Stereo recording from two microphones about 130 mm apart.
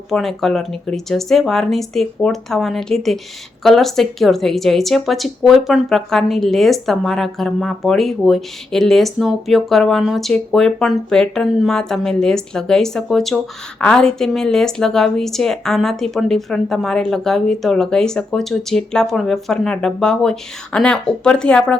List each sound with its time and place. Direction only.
0.1 s speech: centre (ahead or behind)